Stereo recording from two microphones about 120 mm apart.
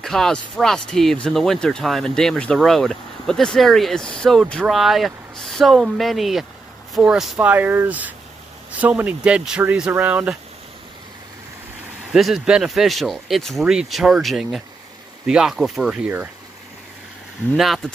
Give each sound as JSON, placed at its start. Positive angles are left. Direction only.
{"t": 0.0, "sound": "speech", "side_deg": 5}
{"t": 12.1, "sound": "speech", "side_deg": 0}
{"t": 17.6, "sound": "speech", "side_deg": 0}